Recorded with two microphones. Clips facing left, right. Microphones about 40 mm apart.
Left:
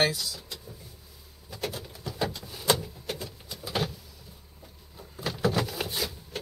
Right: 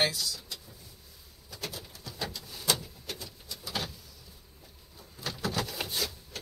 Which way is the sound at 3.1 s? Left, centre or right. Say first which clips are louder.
Left 4 dB; left.